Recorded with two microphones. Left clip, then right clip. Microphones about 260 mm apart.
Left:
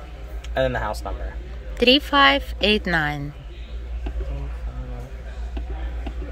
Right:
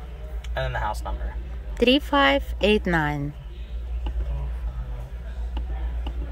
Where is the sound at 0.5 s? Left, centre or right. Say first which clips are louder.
Left 5 dB; left.